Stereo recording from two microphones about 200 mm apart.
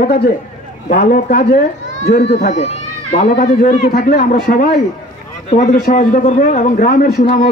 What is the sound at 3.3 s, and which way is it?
A man's voice, 45° left (ahead or behind).